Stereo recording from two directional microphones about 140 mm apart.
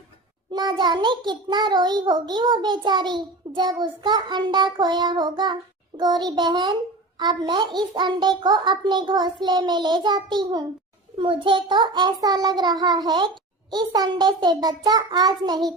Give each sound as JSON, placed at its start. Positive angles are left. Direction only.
{"t": 0.5, "sound": "a child's voice", "side_deg": -30}